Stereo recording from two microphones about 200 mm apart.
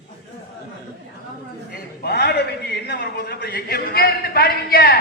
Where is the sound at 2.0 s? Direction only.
55° left (ahead or behind).